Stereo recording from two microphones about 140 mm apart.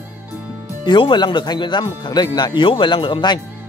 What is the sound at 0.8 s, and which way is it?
Speech, 35° left (ahead or behind).